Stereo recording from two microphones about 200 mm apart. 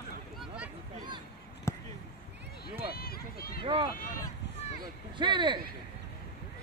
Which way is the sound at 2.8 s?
50° left (ahead or behind).